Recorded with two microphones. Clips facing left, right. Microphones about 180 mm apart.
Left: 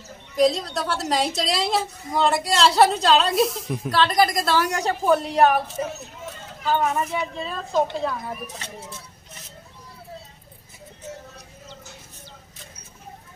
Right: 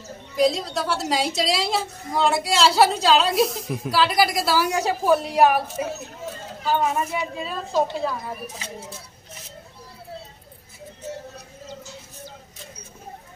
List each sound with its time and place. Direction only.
0.4 s a woman's voice: centre (ahead or behind)